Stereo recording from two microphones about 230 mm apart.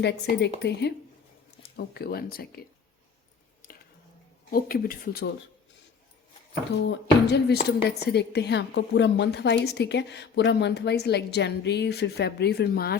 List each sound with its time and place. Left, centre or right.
0.0 s a woman's voice: left
4.5 s speech: left
6.8 s a woman's voice: left